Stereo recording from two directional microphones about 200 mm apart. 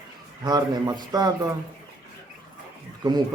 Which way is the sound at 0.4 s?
20° right (ahead or behind).